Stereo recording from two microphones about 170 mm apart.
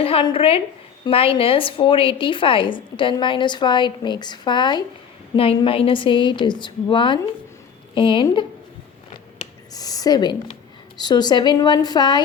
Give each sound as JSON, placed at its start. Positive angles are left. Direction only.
{"t": 0.0, "sound": "a woman's voice", "side_deg": 30}
{"t": 9.7, "sound": "a woman's voice", "side_deg": 20}